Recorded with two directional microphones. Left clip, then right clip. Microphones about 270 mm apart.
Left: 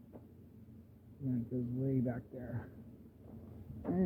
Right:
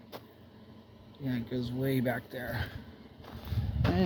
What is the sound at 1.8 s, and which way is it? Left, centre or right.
Speech, centre.